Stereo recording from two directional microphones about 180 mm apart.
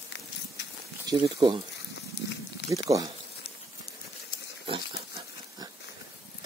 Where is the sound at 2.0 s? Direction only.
75° left (ahead or behind).